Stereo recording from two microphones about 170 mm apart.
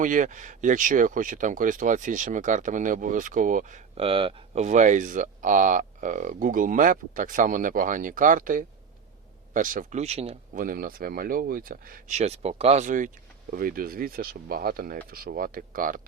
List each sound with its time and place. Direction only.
0.0 s speech: 50° right (ahead or behind)
3.9 s speech: 35° right (ahead or behind)
10.5 s speech: 55° right (ahead or behind)